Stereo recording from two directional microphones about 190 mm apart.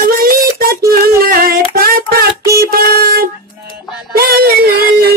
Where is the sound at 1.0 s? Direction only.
50° right (ahead or behind).